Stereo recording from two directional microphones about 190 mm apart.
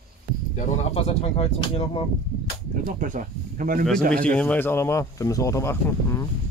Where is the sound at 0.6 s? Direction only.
35° left (ahead or behind).